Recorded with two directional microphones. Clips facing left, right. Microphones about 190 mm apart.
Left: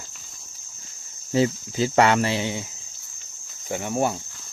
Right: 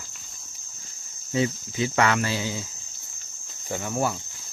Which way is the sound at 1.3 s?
30° left (ahead or behind).